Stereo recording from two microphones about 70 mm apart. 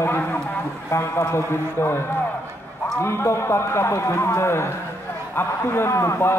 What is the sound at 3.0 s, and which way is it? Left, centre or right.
Speech, left.